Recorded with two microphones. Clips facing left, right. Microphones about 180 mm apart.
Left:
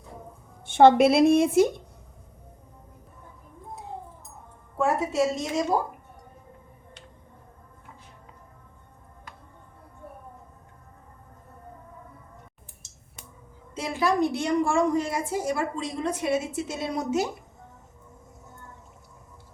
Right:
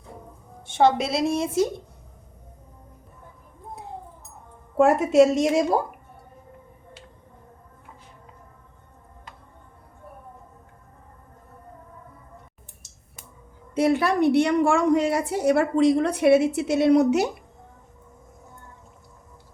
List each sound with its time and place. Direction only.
0.6 s a woman's voice: 55° left (ahead or behind)
4.8 s a woman's voice: 85° right
13.7 s a woman's voice: 60° right (ahead or behind)